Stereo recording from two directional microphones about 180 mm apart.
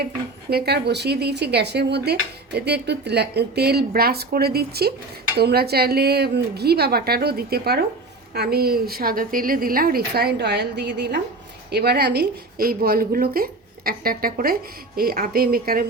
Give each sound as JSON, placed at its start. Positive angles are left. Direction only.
{"t": 0.5, "sound": "a woman's voice", "side_deg": -65}